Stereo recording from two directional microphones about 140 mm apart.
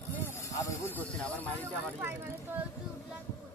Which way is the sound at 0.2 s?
20° left (ahead or behind).